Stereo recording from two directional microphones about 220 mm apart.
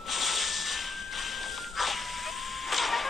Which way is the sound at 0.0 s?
Centre (ahead or behind).